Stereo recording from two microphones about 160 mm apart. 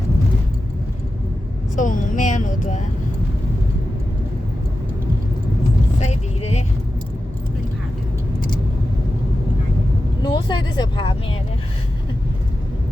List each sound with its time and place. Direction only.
1.7 s speech: 55° left (ahead or behind)
6.0 s vehicle: 45° left (ahead or behind)
10.2 s vehicle: 25° left (ahead or behind)